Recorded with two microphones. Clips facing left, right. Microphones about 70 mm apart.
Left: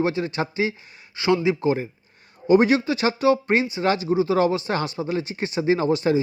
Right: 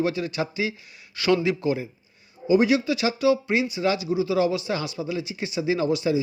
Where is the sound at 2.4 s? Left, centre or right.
Left.